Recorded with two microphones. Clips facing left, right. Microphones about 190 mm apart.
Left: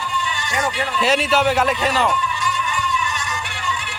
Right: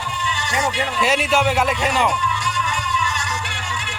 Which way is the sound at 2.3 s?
75° right (ahead or behind).